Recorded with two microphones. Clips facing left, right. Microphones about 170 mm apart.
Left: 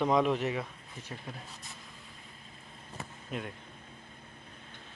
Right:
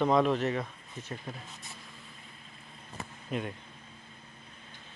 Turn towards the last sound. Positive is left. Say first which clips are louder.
# right 4 dB
turn(degrees=0)  # may be behind; listen again after turning